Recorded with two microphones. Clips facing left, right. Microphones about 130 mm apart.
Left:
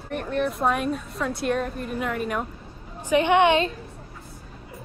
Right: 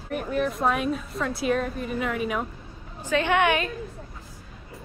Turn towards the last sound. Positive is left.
turn(degrees=25)  # may be behind; listen again after turning